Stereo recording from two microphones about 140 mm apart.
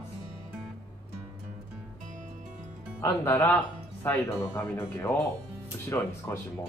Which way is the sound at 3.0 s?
15° left (ahead or behind).